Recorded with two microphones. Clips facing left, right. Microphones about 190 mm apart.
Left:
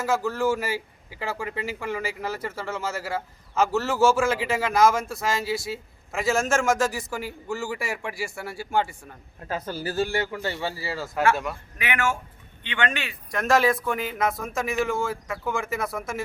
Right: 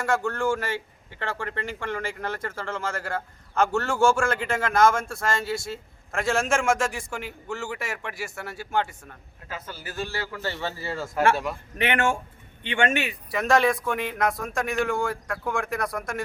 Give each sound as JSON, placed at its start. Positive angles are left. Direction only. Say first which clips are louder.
{"t": 0.0, "sound": "speech", "louder": "left 1 dB", "side_deg": 5}
{"t": 9.5, "sound": "a man's voice", "louder": "left 8 dB", "side_deg": 40}
{"t": 10.3, "sound": "speech", "louder": "left 2 dB", "side_deg": 15}
{"t": 12.9, "sound": "speech", "louder": "right 6 dB", "side_deg": -20}
{"t": 13.3, "sound": "speech", "louder": "even", "side_deg": 0}